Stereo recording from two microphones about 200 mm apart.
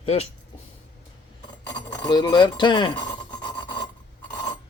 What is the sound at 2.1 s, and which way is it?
Speech, 20° left (ahead or behind).